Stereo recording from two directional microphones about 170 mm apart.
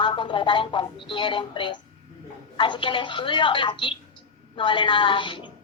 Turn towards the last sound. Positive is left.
turn(degrees=30)  # may be behind; listen again after turning